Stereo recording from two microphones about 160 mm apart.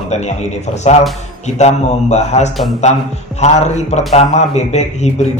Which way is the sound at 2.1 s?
45° left (ahead or behind).